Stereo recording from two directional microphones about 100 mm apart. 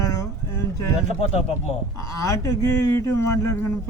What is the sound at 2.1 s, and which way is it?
Speech, 35° left (ahead or behind).